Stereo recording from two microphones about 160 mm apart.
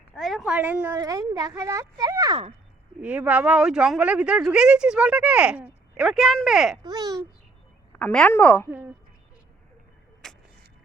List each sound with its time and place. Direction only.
0.2 s speech: centre (ahead or behind)
0.9 s speech: 20° right (ahead or behind)
3.0 s speech: 10° right (ahead or behind)
6.8 s speech: 25° right (ahead or behind)
7.9 s a woman's voice: 5° left (ahead or behind)
10.2 s a sound: 5° left (ahead or behind)